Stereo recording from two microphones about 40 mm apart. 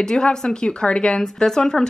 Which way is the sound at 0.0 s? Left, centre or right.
Centre.